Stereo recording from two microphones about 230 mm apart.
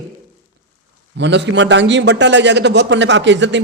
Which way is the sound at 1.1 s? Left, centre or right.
Right.